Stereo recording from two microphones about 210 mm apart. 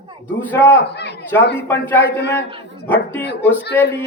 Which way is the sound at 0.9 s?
55° left (ahead or behind).